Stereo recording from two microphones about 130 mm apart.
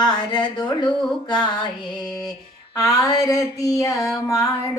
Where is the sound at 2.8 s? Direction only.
25° left (ahead or behind).